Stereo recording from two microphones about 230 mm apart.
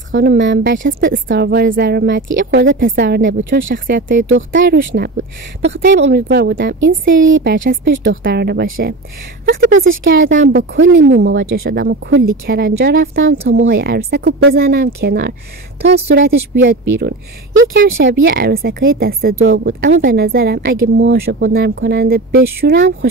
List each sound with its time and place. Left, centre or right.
0.1 s speech: right
3.7 s speech: right
9.7 s speech: right